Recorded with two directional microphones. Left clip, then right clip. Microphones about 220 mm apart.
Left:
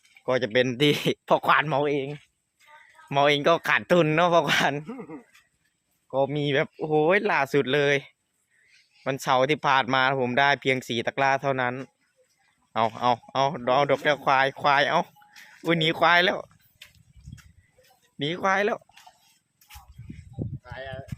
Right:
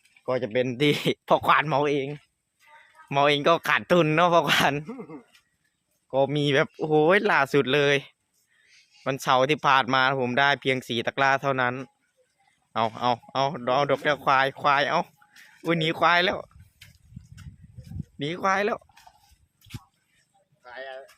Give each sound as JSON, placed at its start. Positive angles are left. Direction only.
{"t": 0.3, "sound": "speech", "side_deg": 5}
{"t": 3.1, "sound": "speech", "side_deg": -5}
{"t": 4.9, "sound": "speech", "side_deg": -5}
{"t": 6.1, "sound": "speech", "side_deg": -20}
{"t": 15.4, "sound": "a sound", "side_deg": 0}
{"t": 18.2, "sound": "speech", "side_deg": 0}
{"t": 20.6, "sound": "a sound", "side_deg": 0}